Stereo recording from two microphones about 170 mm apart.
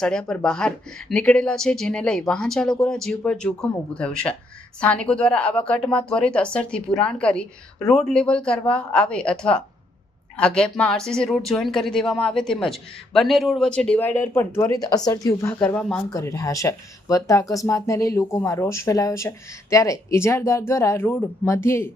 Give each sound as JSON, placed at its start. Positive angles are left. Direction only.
{"t": 0.0, "sound": "a woman's voice", "side_deg": 5}
{"t": 16.1, "sound": "a woman's voice", "side_deg": 20}